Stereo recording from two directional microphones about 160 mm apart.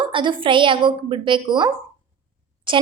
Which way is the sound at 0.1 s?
30° right (ahead or behind).